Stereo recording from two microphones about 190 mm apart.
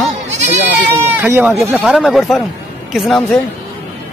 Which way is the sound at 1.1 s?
10° right (ahead or behind).